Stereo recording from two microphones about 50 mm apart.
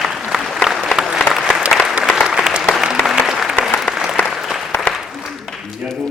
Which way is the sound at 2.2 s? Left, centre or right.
Centre.